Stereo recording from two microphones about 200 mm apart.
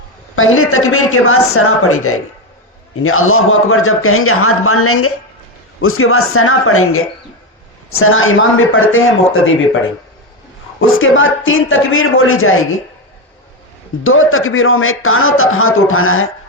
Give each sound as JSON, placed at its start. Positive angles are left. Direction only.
{"t": 0.3, "sound": "a man's voice", "side_deg": 90}
{"t": 14.0, "sound": "a man's voice", "side_deg": 90}